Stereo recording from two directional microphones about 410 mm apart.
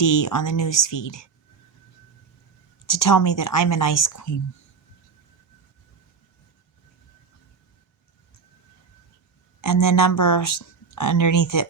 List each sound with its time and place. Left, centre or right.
0.0 s a woman's voice: left
2.8 s a woman's voice: left
9.6 s a woman's voice: left